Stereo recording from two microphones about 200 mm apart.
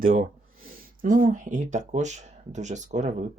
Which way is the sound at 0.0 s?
45° right (ahead or behind).